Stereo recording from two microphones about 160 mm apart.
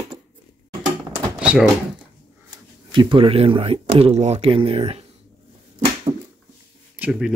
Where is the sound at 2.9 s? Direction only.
30° right (ahead or behind).